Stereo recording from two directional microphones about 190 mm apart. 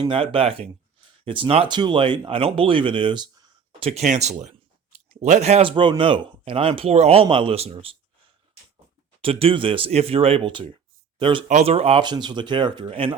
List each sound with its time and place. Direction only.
0.1 s speech: 30° right (ahead or behind)
9.2 s speech: 30° right (ahead or behind)